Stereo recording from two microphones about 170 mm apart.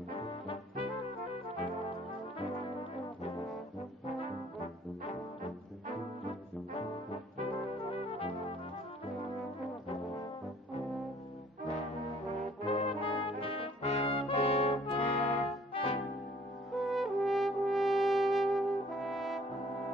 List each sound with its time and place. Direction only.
0.1 s brass instrument: 35° left (ahead or behind)
7.4 s brass instrument: 30° left (ahead or behind)
11.6 s brass instrument: 40° left (ahead or behind)
15.7 s music: 40° left (ahead or behind)
16.7 s french horn: centre (ahead or behind)